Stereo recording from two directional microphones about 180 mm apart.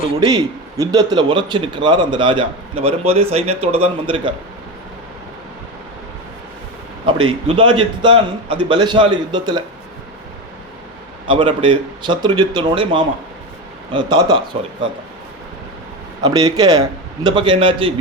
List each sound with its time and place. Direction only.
0.3 s a man's voice: 20° right (ahead or behind)
7.0 s a man's voice: 30° right (ahead or behind)
11.3 s a man's voice: 30° right (ahead or behind)
16.2 s a man's voice: 20° right (ahead or behind)